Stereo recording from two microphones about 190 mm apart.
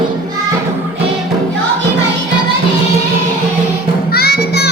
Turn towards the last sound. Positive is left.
turn(degrees=55)  # may be behind; listen again after turning